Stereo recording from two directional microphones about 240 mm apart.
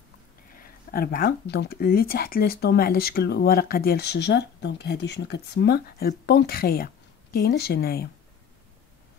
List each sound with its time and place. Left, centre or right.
0.9 s speech: left